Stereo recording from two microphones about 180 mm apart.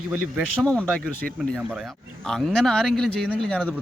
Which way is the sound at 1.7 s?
Centre (ahead or behind).